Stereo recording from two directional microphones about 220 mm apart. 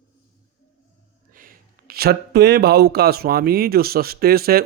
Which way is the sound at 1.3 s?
40° right (ahead or behind).